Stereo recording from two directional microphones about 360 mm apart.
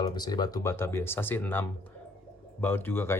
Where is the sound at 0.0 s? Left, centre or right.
Centre.